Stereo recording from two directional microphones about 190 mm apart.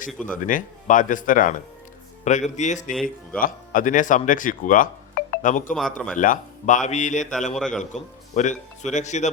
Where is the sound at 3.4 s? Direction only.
45° left (ahead or behind).